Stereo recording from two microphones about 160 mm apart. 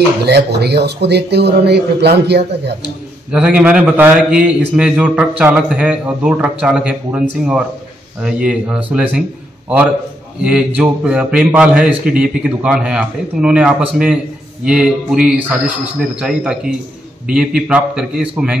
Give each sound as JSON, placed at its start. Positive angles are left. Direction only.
{"t": 0.2, "sound": "a man's voice", "side_deg": -90}
{"t": 3.3, "sound": "a man's voice", "side_deg": -5}
{"t": 10.4, "sound": "a man's voice", "side_deg": -5}